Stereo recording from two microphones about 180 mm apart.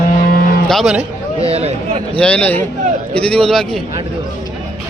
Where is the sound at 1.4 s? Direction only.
35° right (ahead or behind).